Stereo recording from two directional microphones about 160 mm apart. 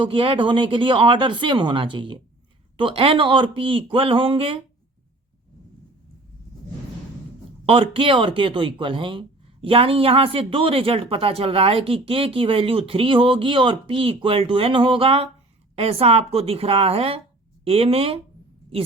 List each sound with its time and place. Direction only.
0.0 s speech: 35° right (ahead or behind)
7.6 s speech: 35° right (ahead or behind)